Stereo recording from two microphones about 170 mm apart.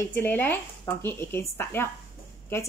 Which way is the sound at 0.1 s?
10° left (ahead or behind).